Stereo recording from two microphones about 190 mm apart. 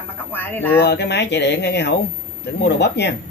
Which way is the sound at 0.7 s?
60° left (ahead or behind).